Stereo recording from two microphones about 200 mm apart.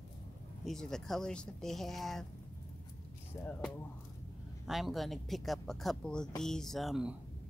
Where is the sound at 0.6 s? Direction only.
Centre (ahead or behind).